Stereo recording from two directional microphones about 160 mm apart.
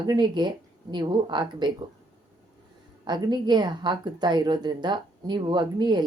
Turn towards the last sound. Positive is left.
turn(degrees=-30)  # may be behind; listen again after turning